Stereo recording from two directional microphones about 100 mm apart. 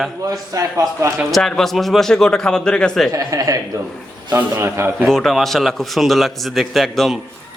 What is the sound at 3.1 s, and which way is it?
Speech, 40° right (ahead or behind).